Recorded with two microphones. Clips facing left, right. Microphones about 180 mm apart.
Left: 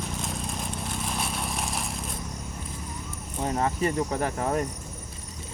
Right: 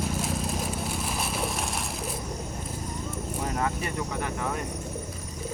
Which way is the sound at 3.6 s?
35° left (ahead or behind).